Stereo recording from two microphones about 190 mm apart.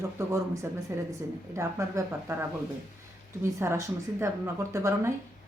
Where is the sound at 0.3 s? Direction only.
15° right (ahead or behind).